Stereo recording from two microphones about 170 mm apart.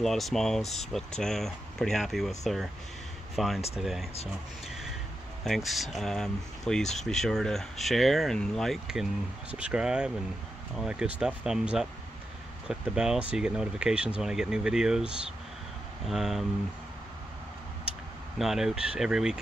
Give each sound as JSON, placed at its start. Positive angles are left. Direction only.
{"t": 0.0, "sound": "speech", "side_deg": 0}
{"t": 5.4, "sound": "speech", "side_deg": 0}
{"t": 16.1, "sound": "speech", "side_deg": 0}
{"t": 18.4, "sound": "speech", "side_deg": 0}